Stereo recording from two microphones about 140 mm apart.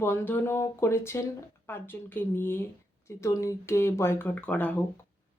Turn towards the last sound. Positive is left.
turn(degrees=10)  # may be behind; listen again after turning